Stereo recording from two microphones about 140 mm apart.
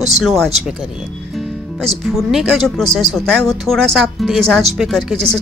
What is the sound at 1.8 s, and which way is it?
Speech, centre (ahead or behind).